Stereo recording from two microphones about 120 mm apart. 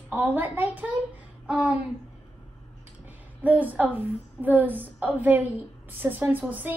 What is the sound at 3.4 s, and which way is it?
A woman's voice, 15° right (ahead or behind).